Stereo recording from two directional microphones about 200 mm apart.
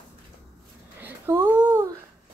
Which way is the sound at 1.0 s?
10° right (ahead or behind).